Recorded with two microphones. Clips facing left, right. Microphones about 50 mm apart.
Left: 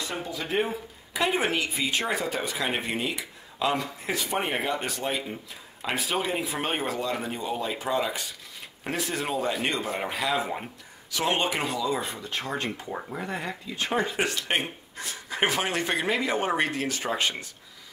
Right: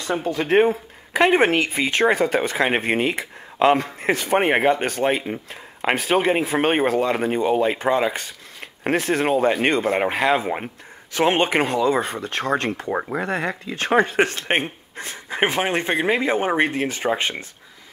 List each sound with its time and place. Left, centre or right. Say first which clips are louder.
0.1 s speech: right 13 dB; right